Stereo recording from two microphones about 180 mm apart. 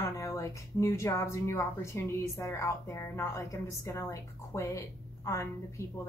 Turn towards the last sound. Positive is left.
turn(degrees=15)  # may be behind; listen again after turning